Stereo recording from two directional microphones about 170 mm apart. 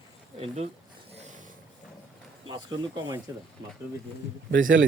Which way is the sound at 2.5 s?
25° right (ahead or behind).